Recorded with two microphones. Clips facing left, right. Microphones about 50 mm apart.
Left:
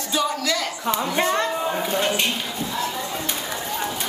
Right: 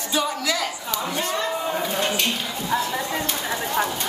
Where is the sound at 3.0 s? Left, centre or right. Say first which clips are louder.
Right 2 dB; right.